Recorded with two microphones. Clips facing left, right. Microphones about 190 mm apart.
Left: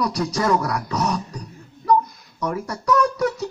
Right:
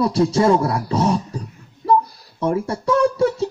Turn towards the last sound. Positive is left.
turn(degrees=-30)  # may be behind; listen again after turning